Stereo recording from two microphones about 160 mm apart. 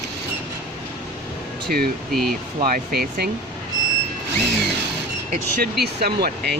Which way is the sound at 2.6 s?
65° right (ahead or behind).